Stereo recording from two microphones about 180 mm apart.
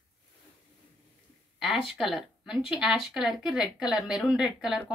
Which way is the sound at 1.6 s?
Centre (ahead or behind).